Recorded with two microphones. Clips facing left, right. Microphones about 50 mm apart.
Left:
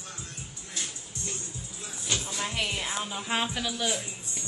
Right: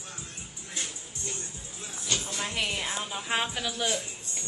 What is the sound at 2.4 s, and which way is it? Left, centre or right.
A woman's voice, centre.